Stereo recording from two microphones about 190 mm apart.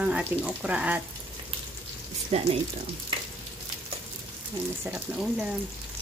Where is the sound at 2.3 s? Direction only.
35° right (ahead or behind).